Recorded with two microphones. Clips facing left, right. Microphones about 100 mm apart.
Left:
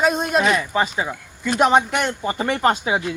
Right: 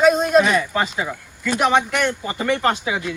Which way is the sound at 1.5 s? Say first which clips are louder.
Left 2 dB; 30° left (ahead or behind).